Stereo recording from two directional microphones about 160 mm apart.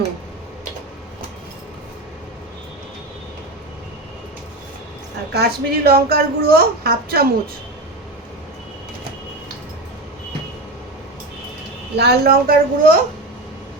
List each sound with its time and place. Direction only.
5.3 s a woman's voice: 85° right
11.9 s a woman's voice: 80° right; by 13.0 s 65° right (ahead or behind)